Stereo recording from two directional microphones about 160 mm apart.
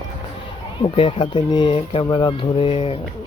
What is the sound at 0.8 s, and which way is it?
Speech, 30° left (ahead or behind).